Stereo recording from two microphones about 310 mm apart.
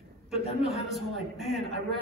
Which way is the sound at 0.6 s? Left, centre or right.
Centre.